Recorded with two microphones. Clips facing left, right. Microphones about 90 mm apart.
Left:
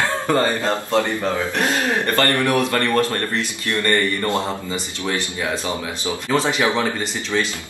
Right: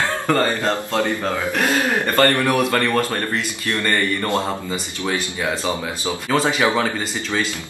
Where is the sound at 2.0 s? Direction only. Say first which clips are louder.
Right 3 dB; 15° right (ahead or behind).